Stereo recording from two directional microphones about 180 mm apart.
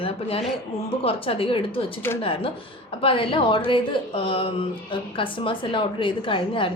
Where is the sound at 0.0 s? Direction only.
30° left (ahead or behind).